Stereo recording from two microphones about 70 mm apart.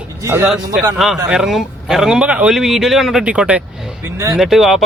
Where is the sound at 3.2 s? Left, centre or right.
Centre.